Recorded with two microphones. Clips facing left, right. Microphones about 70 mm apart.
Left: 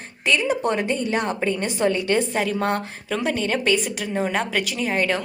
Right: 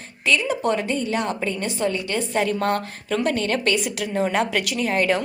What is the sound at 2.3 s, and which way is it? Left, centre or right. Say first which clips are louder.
Speech: right 1 dB; centre.